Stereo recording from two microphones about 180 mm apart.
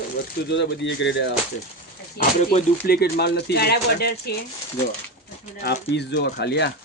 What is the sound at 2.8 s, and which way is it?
Speech, 60° left (ahead or behind).